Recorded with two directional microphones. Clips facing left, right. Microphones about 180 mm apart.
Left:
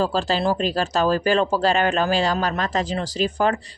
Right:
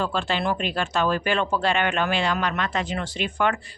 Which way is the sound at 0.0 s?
35° left (ahead or behind).